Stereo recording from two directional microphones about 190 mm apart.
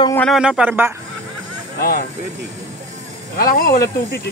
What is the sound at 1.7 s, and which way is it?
Speech, 55° left (ahead or behind).